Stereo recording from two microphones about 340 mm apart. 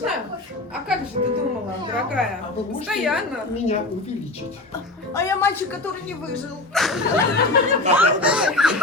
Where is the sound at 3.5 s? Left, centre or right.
Centre.